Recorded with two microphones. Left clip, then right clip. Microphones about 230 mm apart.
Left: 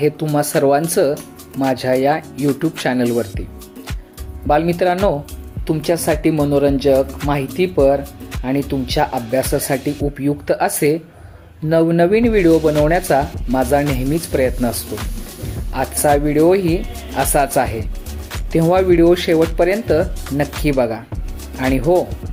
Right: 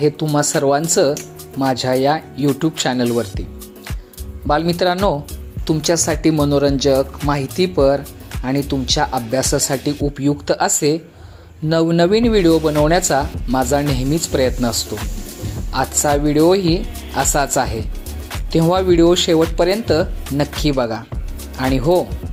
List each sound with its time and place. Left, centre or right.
0.0 s speech: centre
4.4 s speech: centre